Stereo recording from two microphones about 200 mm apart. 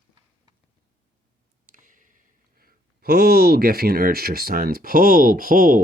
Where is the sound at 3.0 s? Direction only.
50° right (ahead or behind).